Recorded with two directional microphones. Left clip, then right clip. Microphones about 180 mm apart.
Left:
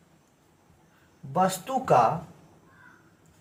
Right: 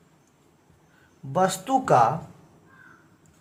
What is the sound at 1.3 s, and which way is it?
Speech, 40° right (ahead or behind).